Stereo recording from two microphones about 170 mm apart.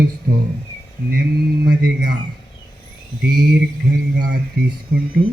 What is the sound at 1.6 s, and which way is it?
Speech, 80° right.